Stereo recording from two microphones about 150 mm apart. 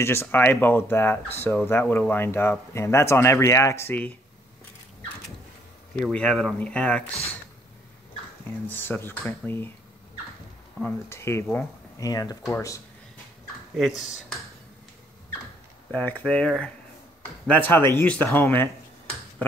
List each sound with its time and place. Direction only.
0.0 s speech: 15° left (ahead or behind)
5.9 s speech: 5° left (ahead or behind)
8.6 s speech: 15° left (ahead or behind)
10.8 s speech: 15° left (ahead or behind)
13.7 s speech: centre (ahead or behind)
15.9 s speech: 10° left (ahead or behind)